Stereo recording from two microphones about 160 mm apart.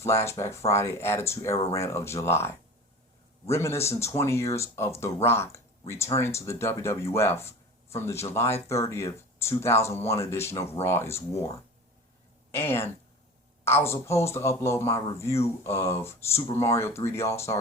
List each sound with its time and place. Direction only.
0.0 s speech: 15° left (ahead or behind)
3.5 s speech: 15° left (ahead or behind)
12.5 s a woman's voice: 15° left (ahead or behind)